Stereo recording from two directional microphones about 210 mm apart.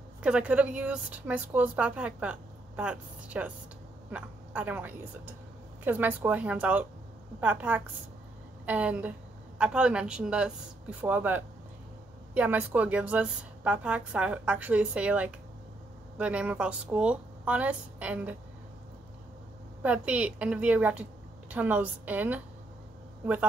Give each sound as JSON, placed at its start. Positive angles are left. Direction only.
{"t": 0.2, "sound": "a woman's voice", "side_deg": -5}
{"t": 19.8, "sound": "speech", "side_deg": -5}